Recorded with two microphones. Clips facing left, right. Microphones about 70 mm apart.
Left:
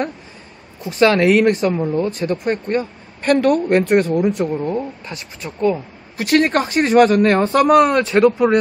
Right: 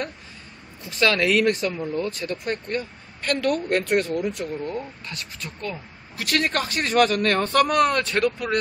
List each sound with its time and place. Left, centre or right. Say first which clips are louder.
0.8 s speech: left 8 dB; left
5.0 s speech: left 5 dB; centre